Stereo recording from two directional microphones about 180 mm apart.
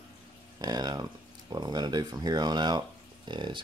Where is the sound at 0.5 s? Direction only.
20° right (ahead or behind).